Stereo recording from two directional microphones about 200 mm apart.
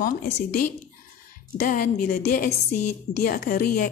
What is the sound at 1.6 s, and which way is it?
A woman's voice, 40° left (ahead or behind).